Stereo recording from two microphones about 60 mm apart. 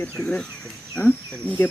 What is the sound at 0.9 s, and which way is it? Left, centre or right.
Speech, left.